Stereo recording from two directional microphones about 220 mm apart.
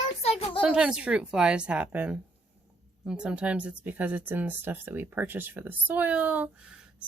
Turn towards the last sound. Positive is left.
turn(degrees=-5)  # may be behind; listen again after turning